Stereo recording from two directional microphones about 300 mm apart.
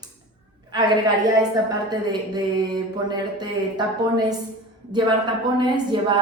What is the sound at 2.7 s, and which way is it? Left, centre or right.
Speech, centre.